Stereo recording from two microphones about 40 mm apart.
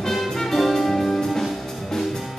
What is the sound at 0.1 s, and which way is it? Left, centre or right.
Music, centre.